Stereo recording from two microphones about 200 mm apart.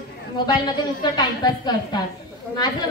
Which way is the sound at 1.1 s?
20° left (ahead or behind).